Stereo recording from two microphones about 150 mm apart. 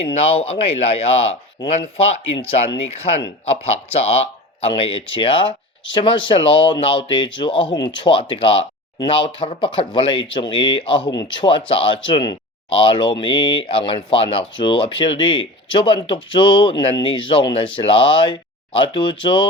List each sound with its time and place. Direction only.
0.0 s speech: 40° left (ahead or behind)